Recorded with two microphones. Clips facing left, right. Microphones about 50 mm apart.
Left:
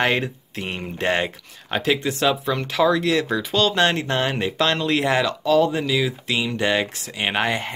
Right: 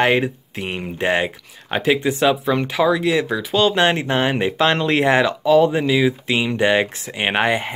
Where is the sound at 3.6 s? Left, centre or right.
Centre.